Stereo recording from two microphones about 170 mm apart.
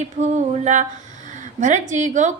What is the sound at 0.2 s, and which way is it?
A woman's voice, 45° right (ahead or behind).